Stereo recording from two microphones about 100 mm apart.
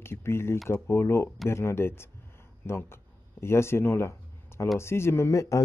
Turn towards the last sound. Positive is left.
turn(degrees=30)  # may be behind; listen again after turning